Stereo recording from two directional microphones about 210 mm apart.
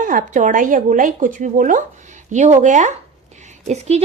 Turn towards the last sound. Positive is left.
turn(degrees=-30)  # may be behind; listen again after turning